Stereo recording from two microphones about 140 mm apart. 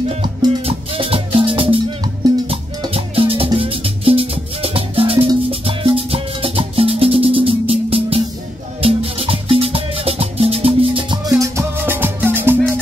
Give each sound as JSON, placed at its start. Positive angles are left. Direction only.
{"t": 0.2, "sound": "music", "side_deg": -35}
{"t": 2.9, "sound": "music", "side_deg": -40}
{"t": 11.2, "sound": "music", "side_deg": -25}